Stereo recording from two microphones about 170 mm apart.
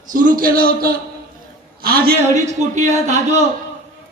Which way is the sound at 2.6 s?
45° right (ahead or behind).